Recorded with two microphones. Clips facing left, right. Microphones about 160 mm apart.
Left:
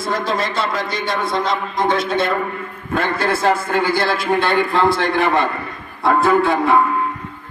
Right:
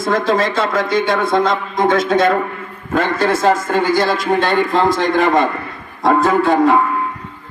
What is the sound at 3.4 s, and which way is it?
A man's voice, 15° right (ahead or behind).